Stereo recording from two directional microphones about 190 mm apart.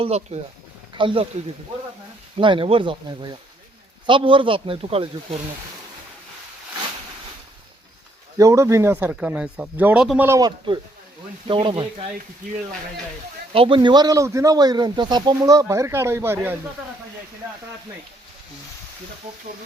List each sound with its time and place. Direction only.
0.0 s a man's voice: 35° right (ahead or behind)
2.4 s a man's voice: 25° right (ahead or behind)
8.4 s a man's voice: 15° right (ahead or behind)
13.5 s a man's voice: 25° right (ahead or behind); by 16.6 s 10° right (ahead or behind)